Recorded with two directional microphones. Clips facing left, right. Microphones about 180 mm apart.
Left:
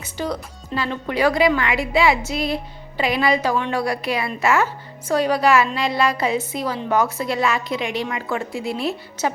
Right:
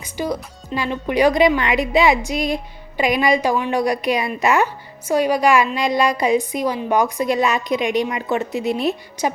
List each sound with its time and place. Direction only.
0.0 s music: 10° right (ahead or behind)
0.7 s a woman's voice: 15° right (ahead or behind)